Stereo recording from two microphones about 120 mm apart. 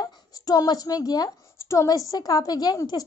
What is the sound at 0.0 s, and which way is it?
A woman's voice, 30° left (ahead or behind).